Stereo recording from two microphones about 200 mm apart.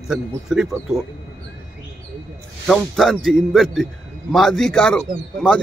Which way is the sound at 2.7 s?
Centre (ahead or behind).